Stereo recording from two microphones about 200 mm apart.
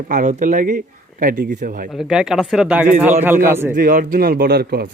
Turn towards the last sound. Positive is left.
turn(degrees=-50)  # may be behind; listen again after turning